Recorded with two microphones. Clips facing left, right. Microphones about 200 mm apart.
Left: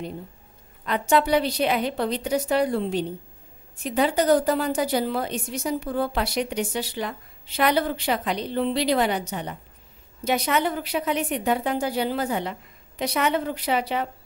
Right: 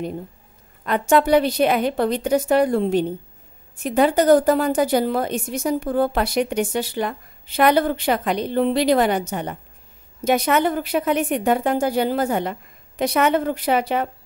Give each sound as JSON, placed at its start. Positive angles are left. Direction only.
{"t": 0.8, "sound": "a woman's voice", "side_deg": -50}